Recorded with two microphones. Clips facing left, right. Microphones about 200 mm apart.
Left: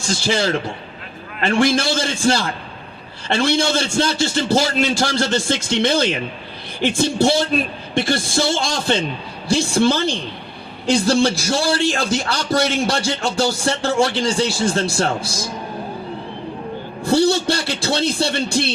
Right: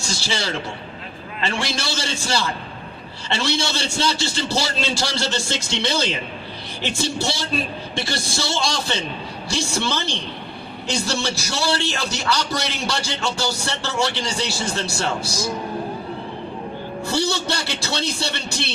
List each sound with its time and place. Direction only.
0.0 s a man's voice: 50° left (ahead or behind)
17.0 s a man's voice: 55° left (ahead or behind)